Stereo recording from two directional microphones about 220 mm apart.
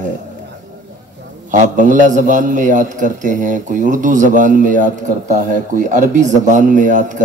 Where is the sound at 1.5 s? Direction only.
35° right (ahead or behind).